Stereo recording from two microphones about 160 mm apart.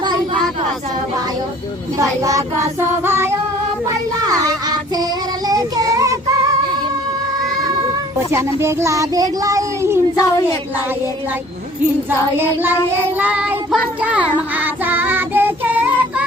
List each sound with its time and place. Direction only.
2.0 s speech: 20° right (ahead or behind)
3.0 s music: 15° right (ahead or behind)
3.8 s child singing: 20° right (ahead or behind)
8.6 s speech: 20° right (ahead or behind)
10.2 s a woman's voice: 20° left (ahead or behind)
13.1 s child singing: 10° right (ahead or behind)